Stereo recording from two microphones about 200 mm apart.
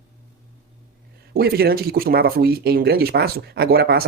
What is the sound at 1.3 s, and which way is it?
Speech, 50° right (ahead or behind).